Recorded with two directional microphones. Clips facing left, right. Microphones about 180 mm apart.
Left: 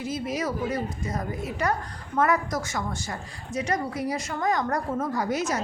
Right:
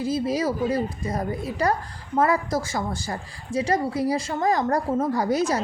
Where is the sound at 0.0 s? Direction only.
30° right (ahead or behind).